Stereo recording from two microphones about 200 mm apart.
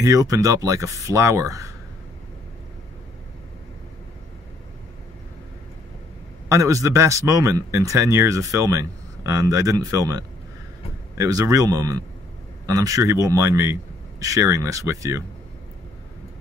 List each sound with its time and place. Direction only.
0.0 s speech: 15° right (ahead or behind)
6.5 s speech: 15° right (ahead or behind)